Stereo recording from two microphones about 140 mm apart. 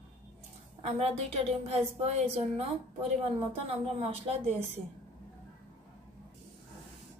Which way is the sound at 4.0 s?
45° right (ahead or behind).